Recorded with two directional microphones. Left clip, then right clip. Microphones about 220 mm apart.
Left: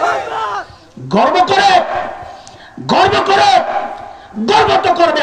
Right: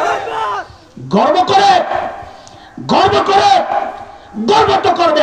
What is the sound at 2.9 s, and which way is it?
Speech, 15° left (ahead or behind).